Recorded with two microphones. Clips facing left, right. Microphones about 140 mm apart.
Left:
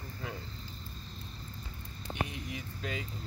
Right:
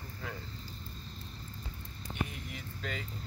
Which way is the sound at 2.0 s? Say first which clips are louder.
Left 1 dB; 90° left.